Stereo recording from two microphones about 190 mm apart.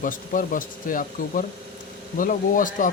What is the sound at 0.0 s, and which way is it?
Speech, 45° left (ahead or behind).